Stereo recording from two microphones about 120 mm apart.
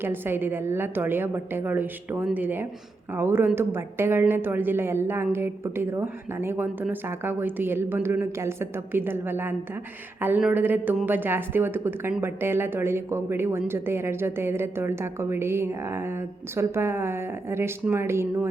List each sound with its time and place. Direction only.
0.0 s a woman's voice: 20° right (ahead or behind)
10.2 s a sound: 15° right (ahead or behind)
10.5 s a woman's voice: 15° right (ahead or behind)